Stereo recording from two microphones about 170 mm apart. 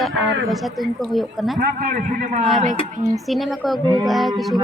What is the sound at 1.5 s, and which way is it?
A man's voice, 55° right (ahead or behind).